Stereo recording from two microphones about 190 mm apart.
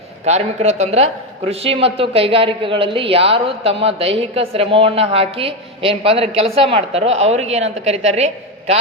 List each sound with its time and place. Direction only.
0.3 s a man's voice: 35° right (ahead or behind)